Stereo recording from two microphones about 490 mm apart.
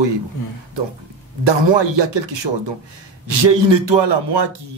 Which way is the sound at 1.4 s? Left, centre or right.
Right.